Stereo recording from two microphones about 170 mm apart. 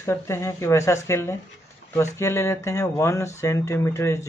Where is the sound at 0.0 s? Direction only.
15° left (ahead or behind).